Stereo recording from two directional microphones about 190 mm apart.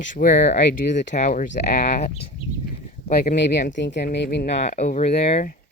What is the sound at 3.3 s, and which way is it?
Speech, 40° left (ahead or behind).